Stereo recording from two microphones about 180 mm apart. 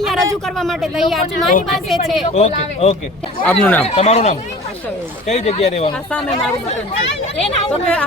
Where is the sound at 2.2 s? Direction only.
40° left (ahead or behind).